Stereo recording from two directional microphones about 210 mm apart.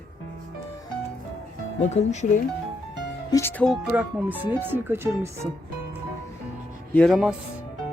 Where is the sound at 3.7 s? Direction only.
5° right (ahead or behind).